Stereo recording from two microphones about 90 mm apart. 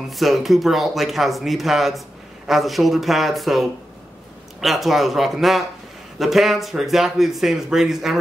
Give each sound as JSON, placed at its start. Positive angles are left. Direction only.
{"t": 0.1, "sound": "speech", "side_deg": 0}